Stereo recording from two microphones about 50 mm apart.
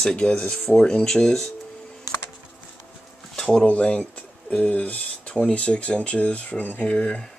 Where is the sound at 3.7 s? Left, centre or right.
Left.